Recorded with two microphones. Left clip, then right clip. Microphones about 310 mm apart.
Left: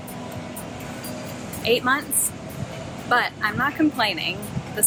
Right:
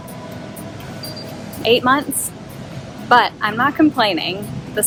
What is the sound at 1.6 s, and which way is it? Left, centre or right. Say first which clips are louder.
Speech: right 6 dB; centre.